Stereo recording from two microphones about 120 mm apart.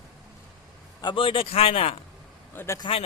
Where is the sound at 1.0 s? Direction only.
45° left (ahead or behind).